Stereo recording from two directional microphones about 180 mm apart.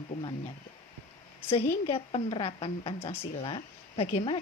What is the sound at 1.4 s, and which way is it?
A woman's voice, 30° left (ahead or behind).